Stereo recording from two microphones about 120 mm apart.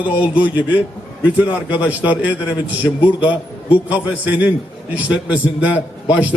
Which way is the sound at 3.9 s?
10° right (ahead or behind).